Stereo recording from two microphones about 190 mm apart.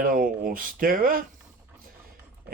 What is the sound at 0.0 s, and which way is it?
Speech, 45° right (ahead or behind).